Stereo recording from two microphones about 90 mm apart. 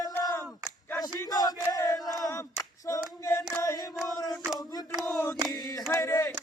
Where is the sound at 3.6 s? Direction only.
40° left (ahead or behind).